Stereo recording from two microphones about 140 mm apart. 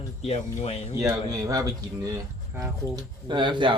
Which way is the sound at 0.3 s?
50° left (ahead or behind).